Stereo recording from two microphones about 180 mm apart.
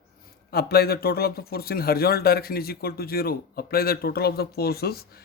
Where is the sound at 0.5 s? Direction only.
60° left (ahead or behind).